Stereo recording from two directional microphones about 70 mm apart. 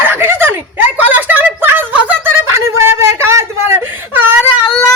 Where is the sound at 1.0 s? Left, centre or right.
Right.